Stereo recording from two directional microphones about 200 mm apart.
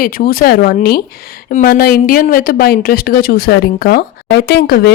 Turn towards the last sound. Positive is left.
turn(degrees=50)  # may be behind; listen again after turning